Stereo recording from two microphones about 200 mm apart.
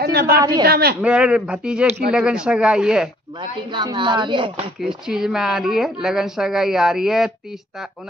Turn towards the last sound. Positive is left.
turn(degrees=0)  # may be behind; listen again after turning